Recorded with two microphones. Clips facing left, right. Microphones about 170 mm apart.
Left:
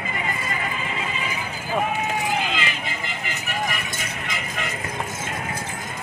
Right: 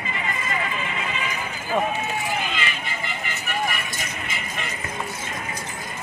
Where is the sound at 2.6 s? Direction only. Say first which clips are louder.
Left 1 dB; 90° left.